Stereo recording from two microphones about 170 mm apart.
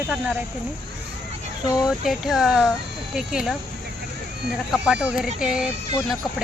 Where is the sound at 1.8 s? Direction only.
Centre (ahead or behind).